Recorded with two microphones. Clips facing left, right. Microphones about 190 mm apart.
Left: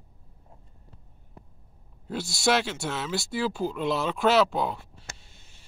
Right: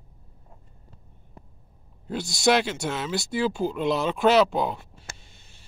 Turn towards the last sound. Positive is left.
turn(degrees=0)  # may be behind; listen again after turning